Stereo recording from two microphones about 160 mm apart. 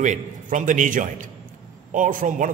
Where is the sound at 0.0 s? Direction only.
50° right (ahead or behind).